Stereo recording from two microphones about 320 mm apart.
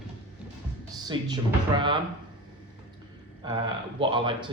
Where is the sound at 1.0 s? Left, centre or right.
Centre.